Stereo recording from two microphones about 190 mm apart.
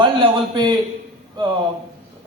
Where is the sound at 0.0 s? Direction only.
25° right (ahead or behind).